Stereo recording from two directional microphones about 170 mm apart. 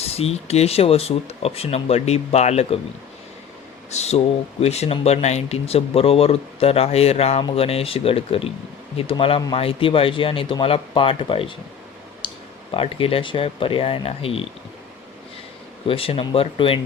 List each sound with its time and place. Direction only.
0.0 s speech: 35° left (ahead or behind)
3.9 s speech: 40° left (ahead or behind)
12.2 s clicking: 30° left (ahead or behind)
12.7 s speech: 35° left (ahead or behind)
15.9 s speech: 35° left (ahead or behind)